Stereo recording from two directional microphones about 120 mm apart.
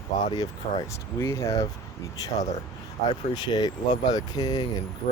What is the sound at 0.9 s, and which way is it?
Speech, 25° left (ahead or behind).